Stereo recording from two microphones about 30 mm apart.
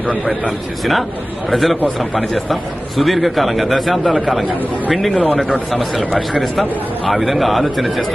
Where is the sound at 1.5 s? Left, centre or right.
Centre.